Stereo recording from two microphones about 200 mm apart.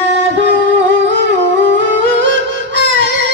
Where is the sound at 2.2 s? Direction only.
65° right (ahead or behind).